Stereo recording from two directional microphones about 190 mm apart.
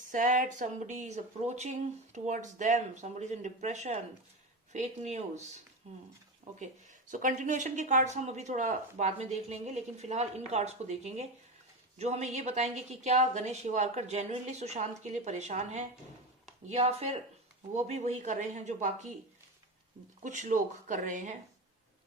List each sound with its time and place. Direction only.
0.1 s a woman's voice: 45° right (ahead or behind)
7.1 s a woman's voice: 45° right (ahead or behind)
20.2 s a woman's voice: 40° right (ahead or behind)